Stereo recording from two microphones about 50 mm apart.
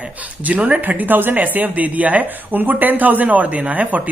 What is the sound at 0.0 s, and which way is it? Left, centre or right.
Speech, right.